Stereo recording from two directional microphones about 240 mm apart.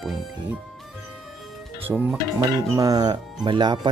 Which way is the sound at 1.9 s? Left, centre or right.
Centre.